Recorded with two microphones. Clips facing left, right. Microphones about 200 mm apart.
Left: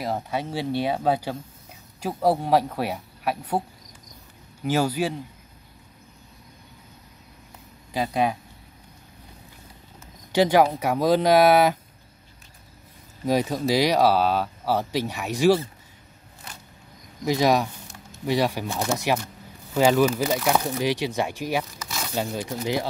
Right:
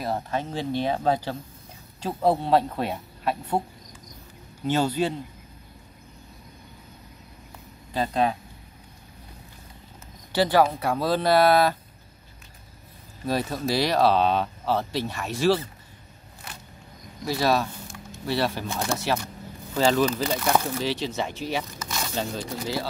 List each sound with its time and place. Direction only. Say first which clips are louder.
0.0 s speech: even; 10° left (ahead or behind)
4.6 s speech: even; 10° left (ahead or behind)
7.9 s speech: even; 10° left (ahead or behind)
10.3 s speech: left 2 dB; 15° left (ahead or behind)
13.2 s speech: left 4 dB; 15° left (ahead or behind)
17.2 s speech: left 3 dB; 15° left (ahead or behind)